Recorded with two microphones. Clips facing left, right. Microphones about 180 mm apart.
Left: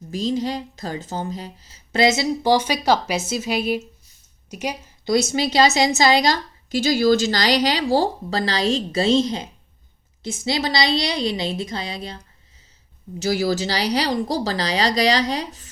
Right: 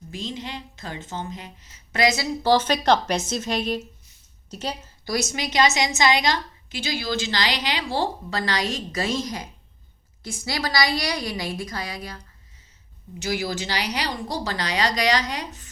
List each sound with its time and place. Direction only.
0.1 s a woman's voice: 40° left (ahead or behind)
2.4 s a woman's voice: 10° left (ahead or behind)
5.0 s a woman's voice: 25° left (ahead or behind)
13.1 s a woman's voice: 35° left (ahead or behind)